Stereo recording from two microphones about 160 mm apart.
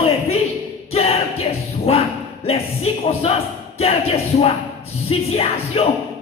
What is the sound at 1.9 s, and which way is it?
Speech, 40° left (ahead or behind).